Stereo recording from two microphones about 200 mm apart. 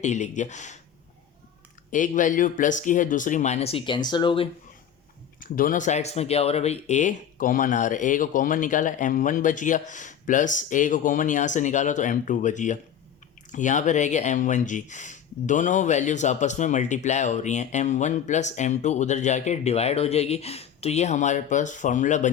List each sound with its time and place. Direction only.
0.0 s speech: 35° left (ahead or behind)
1.9 s speech: 40° left (ahead or behind); by 4.4 s 25° left (ahead or behind)
5.4 s speech: 45° left (ahead or behind)